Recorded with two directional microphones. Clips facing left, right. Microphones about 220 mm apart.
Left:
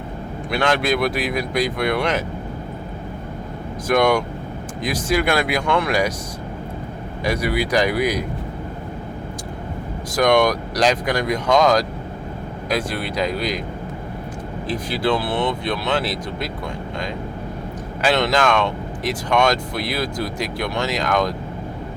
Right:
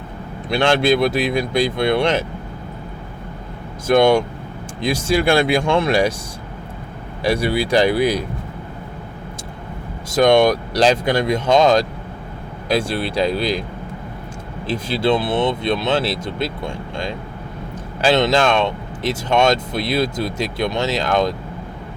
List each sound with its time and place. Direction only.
0.5 s speech: 25° right (ahead or behind)
3.8 s speech: 25° right (ahead or behind)
7.3 s speech: 30° right (ahead or behind)
10.1 s speech: 25° right (ahead or behind)
14.7 s speech: 25° right (ahead or behind)
18.0 s speech: 25° right (ahead or behind)